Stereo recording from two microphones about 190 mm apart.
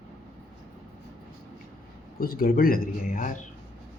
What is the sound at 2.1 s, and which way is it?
Speech, 50° left (ahead or behind).